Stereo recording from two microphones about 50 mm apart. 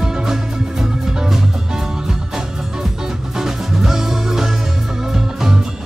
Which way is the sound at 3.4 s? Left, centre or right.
Centre.